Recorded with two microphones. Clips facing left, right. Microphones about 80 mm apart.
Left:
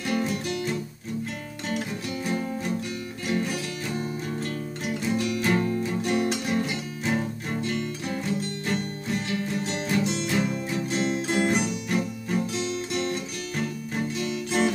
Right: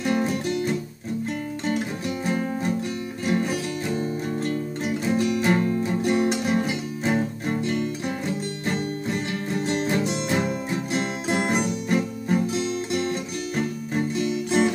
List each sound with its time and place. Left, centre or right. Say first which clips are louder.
0.0 s music: right 4 dB; right
3.3 s music: right 3 dB; right
9.3 s music: right 3 dB; right
11.3 s music: right 3 dB; right
14.2 s music: right 3 dB; right